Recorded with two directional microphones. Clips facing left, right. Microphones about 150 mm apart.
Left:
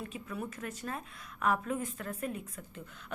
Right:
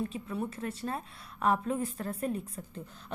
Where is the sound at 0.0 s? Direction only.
30° right (ahead or behind).